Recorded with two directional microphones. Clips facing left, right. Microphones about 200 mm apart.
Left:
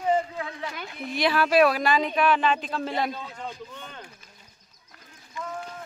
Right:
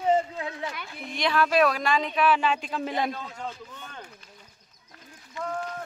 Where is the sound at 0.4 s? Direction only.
20° right (ahead or behind).